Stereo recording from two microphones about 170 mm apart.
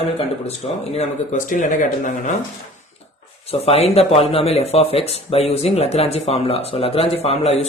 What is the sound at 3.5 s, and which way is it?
Speech, 35° left (ahead or behind).